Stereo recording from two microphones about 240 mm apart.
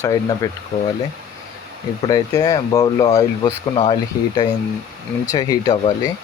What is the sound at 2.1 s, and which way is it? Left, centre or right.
Speech, centre.